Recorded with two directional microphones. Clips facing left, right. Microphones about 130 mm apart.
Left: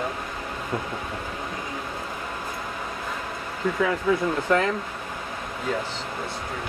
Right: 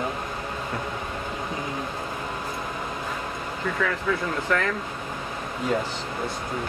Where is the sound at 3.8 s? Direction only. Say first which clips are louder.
Left 4 dB; 20° left (ahead or behind).